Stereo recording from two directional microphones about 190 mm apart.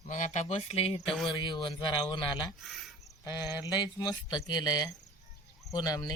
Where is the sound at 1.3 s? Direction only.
25° left (ahead or behind).